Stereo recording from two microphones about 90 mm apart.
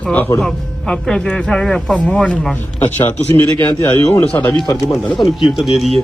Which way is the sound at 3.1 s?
25° left (ahead or behind).